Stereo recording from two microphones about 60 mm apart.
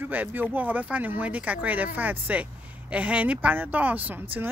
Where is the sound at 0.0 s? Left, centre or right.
Right.